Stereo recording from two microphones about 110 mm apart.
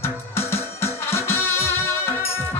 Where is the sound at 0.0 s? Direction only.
25° left (ahead or behind).